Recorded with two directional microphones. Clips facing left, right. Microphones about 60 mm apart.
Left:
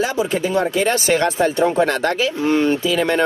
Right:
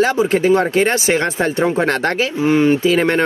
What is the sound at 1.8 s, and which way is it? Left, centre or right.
Speech, right.